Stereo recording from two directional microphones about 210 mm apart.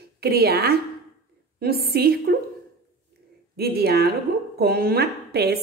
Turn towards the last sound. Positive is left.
turn(degrees=-50)  # may be behind; listen again after turning